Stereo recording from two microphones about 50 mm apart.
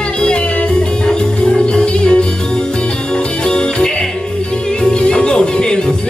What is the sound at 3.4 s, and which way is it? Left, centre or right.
Music, centre.